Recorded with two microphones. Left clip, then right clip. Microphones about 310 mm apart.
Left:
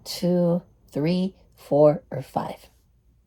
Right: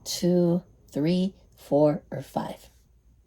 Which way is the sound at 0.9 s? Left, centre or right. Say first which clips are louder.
Left 1 dB; left.